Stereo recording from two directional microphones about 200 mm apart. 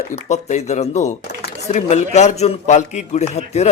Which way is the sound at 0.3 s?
35° left (ahead or behind).